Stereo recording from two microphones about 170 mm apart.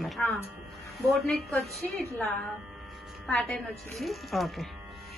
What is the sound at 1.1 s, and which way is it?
Speech, centre (ahead or behind).